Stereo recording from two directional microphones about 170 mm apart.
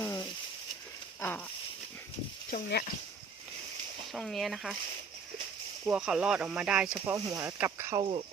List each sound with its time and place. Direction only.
0.0 s a sound: 20° left (ahead or behind)
2.5 s speech: 70° left (ahead or behind)
4.1 s speech: centre (ahead or behind)
5.8 s speech: 5° right (ahead or behind)
7.1 s speech: 15° right (ahead or behind)